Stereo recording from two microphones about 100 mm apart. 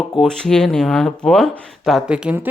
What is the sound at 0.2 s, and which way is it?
A woman's voice, 5° left (ahead or behind).